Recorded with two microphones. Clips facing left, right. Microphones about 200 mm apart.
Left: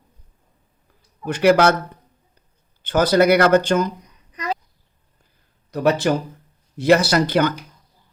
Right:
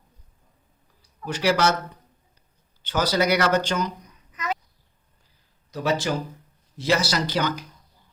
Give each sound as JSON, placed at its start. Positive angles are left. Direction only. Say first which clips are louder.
{"t": 1.2, "sound": "speech", "louder": "left 7 dB", "side_deg": 55}
{"t": 2.8, "sound": "speech", "louder": "left 7 dB", "side_deg": 55}
{"t": 4.3, "sound": "a sound", "louder": "left 3 dB", "side_deg": 35}
{"t": 5.7, "sound": "speech", "louder": "left 6 dB", "side_deg": 60}